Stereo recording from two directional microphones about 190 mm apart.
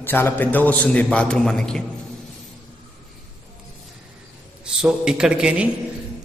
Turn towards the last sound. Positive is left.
turn(degrees=-5)  # may be behind; listen again after turning